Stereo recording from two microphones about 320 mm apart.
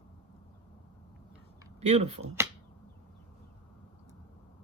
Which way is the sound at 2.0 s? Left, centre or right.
Right.